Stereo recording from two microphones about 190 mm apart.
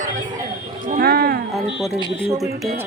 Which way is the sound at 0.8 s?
50° right (ahead or behind).